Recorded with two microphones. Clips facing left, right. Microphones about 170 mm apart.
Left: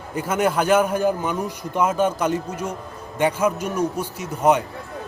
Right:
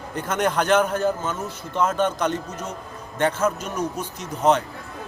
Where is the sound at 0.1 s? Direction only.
5° left (ahead or behind).